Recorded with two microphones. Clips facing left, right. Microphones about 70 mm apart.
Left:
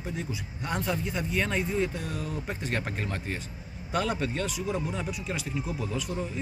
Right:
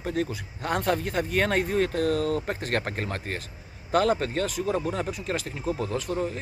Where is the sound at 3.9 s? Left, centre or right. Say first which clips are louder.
Right 6 dB; right.